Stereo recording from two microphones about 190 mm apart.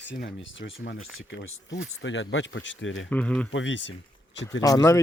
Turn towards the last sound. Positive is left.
turn(degrees=20)  # may be behind; listen again after turning